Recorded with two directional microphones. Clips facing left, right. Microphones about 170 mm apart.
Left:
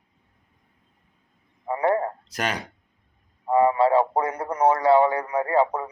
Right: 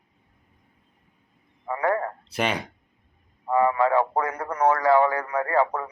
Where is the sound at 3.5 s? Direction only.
30° left (ahead or behind).